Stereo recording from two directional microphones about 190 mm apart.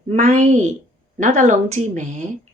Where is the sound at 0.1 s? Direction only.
40° right (ahead or behind).